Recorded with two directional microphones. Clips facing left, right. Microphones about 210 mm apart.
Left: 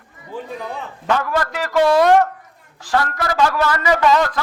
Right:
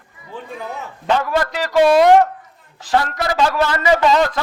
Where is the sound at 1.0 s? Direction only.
20° right (ahead or behind).